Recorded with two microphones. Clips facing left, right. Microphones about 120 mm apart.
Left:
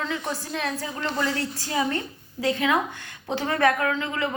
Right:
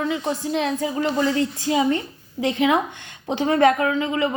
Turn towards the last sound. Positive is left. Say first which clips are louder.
# right 5 dB
turn(degrees=-20)  # may be behind; listen again after turning